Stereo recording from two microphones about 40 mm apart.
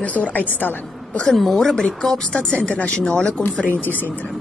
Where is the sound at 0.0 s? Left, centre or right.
Left.